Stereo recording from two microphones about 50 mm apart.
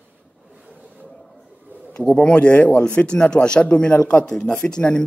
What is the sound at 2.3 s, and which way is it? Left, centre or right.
A man's voice, left.